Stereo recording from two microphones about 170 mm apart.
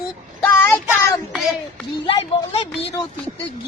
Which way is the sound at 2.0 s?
35° left (ahead or behind).